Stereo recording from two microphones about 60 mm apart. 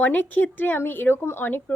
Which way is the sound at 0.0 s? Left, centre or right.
Left.